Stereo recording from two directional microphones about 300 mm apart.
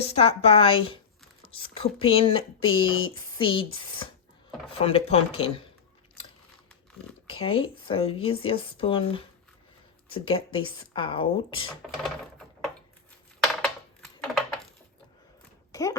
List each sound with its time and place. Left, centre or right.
0.1 s speech: centre
4.8 s speech: centre
7.3 s speech: centre
11.8 s a sound: centre
13.4 s typing: centre
15.7 s a sound: centre